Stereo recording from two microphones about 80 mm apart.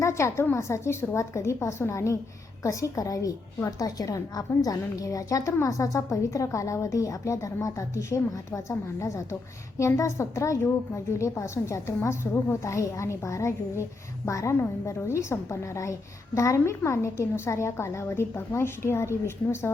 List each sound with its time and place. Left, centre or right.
0.0 s a woman's voice: left